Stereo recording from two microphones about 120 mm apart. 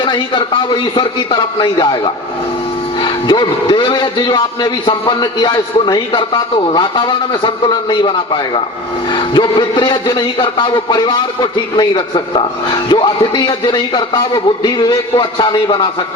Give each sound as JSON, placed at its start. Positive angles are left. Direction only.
{"t": 0.0, "sound": "a man's voice", "side_deg": 40}